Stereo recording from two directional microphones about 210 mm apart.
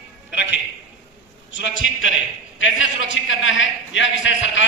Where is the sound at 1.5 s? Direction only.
60° left (ahead or behind).